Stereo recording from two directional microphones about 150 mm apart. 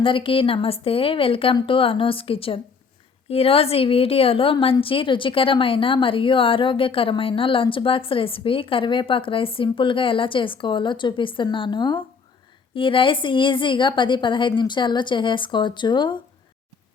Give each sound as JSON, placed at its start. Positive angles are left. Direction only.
{"t": 0.0, "sound": "a woman's voice", "side_deg": 35}